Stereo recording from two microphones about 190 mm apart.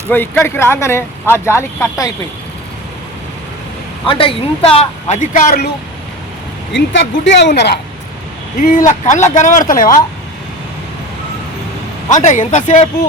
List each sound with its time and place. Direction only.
0.1 s speech: 10° left (ahead or behind)
4.0 s speech: 30° left (ahead or behind); by 5.7 s 50° left (ahead or behind)
6.7 s speech: 70° left (ahead or behind)
8.9 s speech: 40° left (ahead or behind)
12.0 s speech: 40° left (ahead or behind)